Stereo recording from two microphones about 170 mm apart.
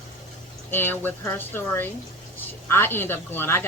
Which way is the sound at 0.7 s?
10° left (ahead or behind).